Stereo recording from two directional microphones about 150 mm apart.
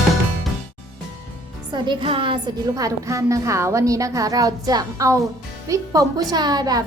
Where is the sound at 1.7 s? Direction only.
35° right (ahead or behind).